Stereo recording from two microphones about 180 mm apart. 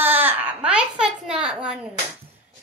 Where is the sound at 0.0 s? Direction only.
10° right (ahead or behind).